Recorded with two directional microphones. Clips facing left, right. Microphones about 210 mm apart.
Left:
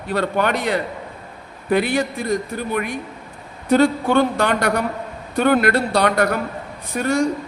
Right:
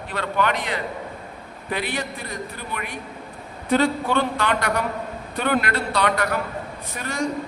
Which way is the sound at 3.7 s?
45° left (ahead or behind).